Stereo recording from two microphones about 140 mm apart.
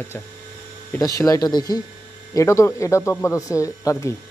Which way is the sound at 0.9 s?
25° left (ahead or behind).